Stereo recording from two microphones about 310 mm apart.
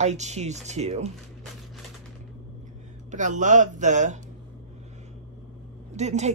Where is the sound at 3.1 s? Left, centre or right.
Right.